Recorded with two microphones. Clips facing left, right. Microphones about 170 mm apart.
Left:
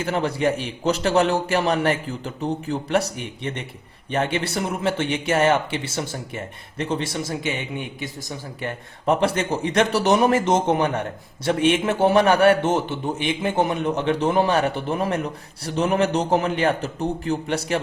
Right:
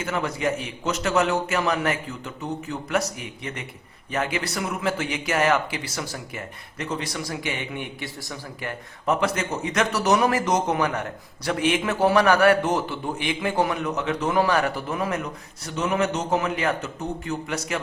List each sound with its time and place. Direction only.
0.0 s a man's voice: 30° left (ahead or behind)